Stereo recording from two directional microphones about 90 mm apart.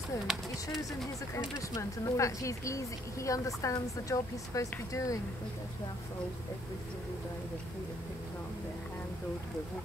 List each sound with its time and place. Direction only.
1.8 s a woman's voice: 35° left (ahead or behind)